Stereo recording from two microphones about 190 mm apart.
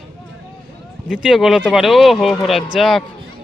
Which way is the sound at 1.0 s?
Centre (ahead or behind).